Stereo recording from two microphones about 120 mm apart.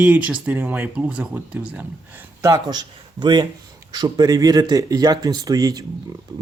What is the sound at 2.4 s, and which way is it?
Speech, 30° right (ahead or behind).